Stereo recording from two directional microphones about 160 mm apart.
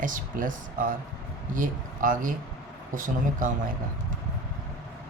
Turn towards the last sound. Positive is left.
turn(degrees=-55)  # may be behind; listen again after turning